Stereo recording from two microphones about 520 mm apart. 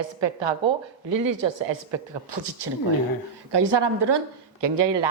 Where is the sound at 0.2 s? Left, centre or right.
Right.